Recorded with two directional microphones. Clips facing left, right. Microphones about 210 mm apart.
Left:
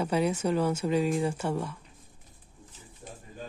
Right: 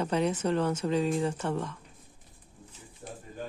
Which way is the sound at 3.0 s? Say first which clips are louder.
Right 3 dB; 50° right (ahead or behind).